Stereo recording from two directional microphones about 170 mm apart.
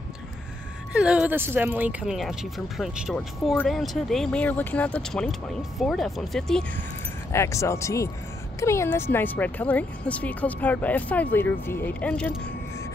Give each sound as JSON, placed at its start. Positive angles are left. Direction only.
{"t": 0.9, "sound": "speech", "side_deg": -5}
{"t": 7.3, "sound": "speech", "side_deg": 15}